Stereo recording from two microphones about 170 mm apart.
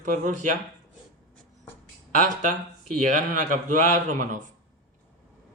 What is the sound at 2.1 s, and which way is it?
A man's voice, 50° right (ahead or behind).